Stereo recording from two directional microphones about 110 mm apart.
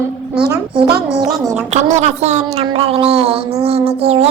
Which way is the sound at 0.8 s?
35° right (ahead or behind).